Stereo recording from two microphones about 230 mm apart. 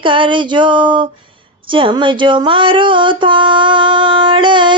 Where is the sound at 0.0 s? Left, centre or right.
Right.